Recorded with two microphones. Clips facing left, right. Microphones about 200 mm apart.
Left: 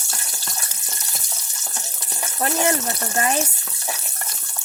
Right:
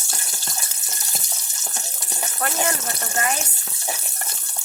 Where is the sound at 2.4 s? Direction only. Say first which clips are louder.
Left 4 dB; 25° left (ahead or behind).